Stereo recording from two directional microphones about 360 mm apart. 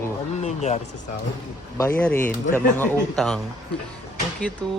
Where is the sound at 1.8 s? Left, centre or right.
Centre.